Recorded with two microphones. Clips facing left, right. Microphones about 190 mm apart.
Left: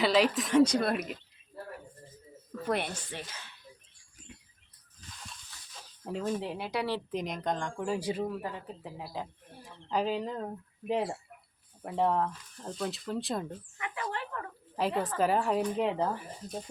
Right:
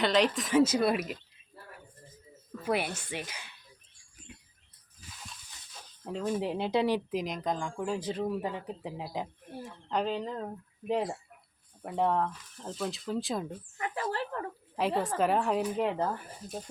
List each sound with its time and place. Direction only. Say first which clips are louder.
0.0 s speech: left 1 dB; 5° left (ahead or behind)
2.6 s speech: right 1 dB; 5° right (ahead or behind)
4.9 s a sound: even; 5° right (ahead or behind)
6.1 s speech: even; 5° left (ahead or behind)
6.3 s speech: right 4 dB; 15° right (ahead or behind)
7.1 s speech: right 1 dB; centre (ahead or behind)
7.9 s speech: left 2 dB; 10° left (ahead or behind)
8.3 s speech: right 4 dB; 15° right (ahead or behind)
9.6 s speech: left 1 dB; 5° left (ahead or behind)
13.7 s speech: right 4 dB; 35° right (ahead or behind)
14.8 s speech: right 1 dB; centre (ahead or behind)